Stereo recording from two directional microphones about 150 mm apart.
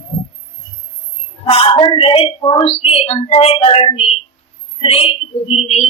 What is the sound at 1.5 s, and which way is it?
Speech, 35° left (ahead or behind).